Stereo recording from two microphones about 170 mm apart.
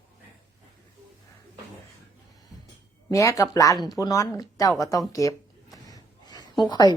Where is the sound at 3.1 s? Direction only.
20° left (ahead or behind).